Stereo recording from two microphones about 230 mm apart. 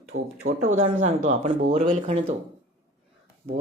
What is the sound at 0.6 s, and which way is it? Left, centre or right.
Speech, right.